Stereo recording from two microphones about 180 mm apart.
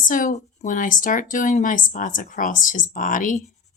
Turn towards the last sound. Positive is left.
turn(degrees=45)  # may be behind; listen again after turning